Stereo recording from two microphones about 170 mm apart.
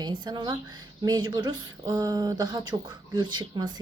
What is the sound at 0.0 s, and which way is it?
Speech, 25° right (ahead or behind).